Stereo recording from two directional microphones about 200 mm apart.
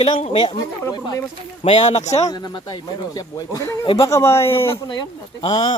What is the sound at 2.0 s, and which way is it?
Speech, 15° left (ahead or behind).